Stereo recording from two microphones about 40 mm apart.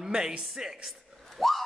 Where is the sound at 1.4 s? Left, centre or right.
Centre.